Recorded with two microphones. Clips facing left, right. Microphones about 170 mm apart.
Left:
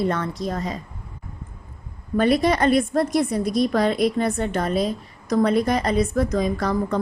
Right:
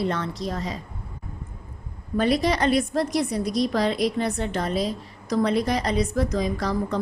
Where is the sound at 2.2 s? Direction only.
55° left (ahead or behind).